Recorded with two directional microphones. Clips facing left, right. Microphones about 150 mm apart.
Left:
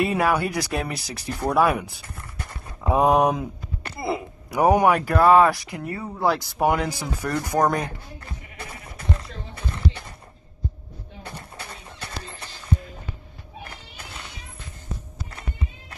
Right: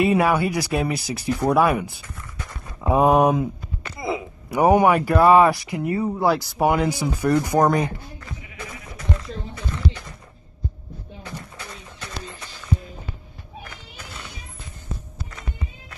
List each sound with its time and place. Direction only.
0.0 s speech: centre (ahead or behind)
4.5 s speech: centre (ahead or behind)
5.9 s speech: 20° right (ahead or behind)
6.2 s speech: centre (ahead or behind)
9.7 s a sound: 30° left (ahead or behind)
11.2 s a sound: 30° left (ahead or behind)